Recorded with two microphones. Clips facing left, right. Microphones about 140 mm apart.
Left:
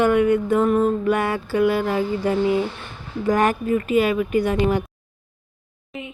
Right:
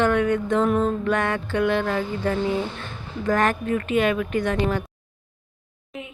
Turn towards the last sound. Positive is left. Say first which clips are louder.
# left 2 dB
turn(degrees=0)  # may be behind; listen again after turning